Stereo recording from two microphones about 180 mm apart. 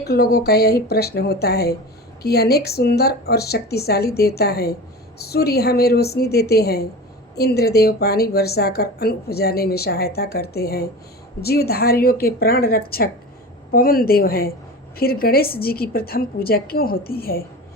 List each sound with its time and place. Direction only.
0.0 s a woman's voice: 60° left (ahead or behind)